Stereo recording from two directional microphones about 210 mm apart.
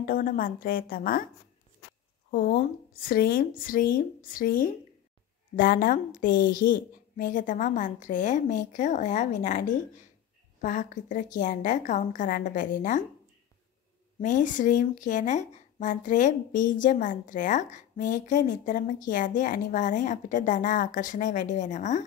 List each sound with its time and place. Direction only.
0.0 s speech: 40° left (ahead or behind)
2.3 s speech: 45° left (ahead or behind)
14.2 s speech: 40° left (ahead or behind)